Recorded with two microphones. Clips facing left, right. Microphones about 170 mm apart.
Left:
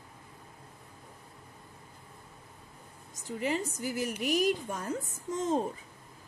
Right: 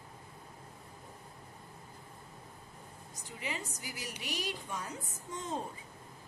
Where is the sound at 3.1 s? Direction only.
45° left (ahead or behind).